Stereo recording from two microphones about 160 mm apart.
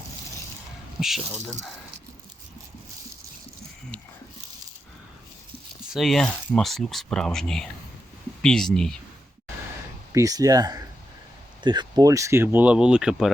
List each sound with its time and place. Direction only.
0.9 s speech: centre (ahead or behind)
5.9 s speech: centre (ahead or behind)
10.1 s speech: 20° right (ahead or behind); by 13.3 s 5° right (ahead or behind)